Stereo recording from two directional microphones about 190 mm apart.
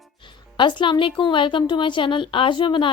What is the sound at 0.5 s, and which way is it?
Speech, 25° left (ahead or behind).